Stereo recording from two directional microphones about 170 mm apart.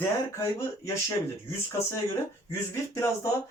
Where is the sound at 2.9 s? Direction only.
15° left (ahead or behind).